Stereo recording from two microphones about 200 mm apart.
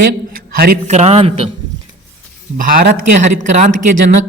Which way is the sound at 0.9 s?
35° right (ahead or behind).